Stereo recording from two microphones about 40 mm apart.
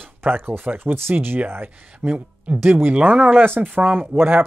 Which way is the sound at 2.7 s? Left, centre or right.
Right.